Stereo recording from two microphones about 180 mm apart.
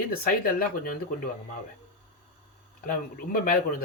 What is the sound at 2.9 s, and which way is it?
Speech, 50° left (ahead or behind).